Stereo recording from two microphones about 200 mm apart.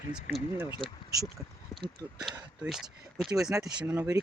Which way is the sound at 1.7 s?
20° left (ahead or behind).